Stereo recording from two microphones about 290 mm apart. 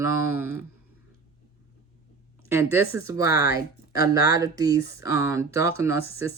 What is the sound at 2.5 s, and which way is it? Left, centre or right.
Speech, centre.